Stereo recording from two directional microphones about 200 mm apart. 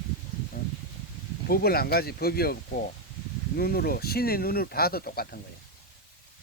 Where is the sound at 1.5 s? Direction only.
50° left (ahead or behind).